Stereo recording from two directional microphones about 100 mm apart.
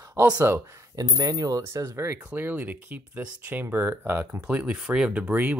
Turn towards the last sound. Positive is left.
turn(degrees=-15)  # may be behind; listen again after turning